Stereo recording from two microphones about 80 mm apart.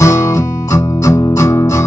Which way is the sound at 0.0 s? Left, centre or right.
Left.